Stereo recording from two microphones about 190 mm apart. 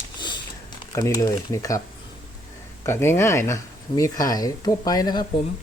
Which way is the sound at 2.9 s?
15° left (ahead or behind).